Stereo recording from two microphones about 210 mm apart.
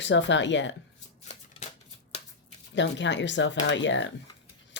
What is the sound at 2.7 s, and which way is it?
Speech, 60° left (ahead or behind).